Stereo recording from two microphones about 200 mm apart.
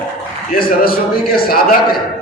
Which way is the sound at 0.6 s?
50° left (ahead or behind).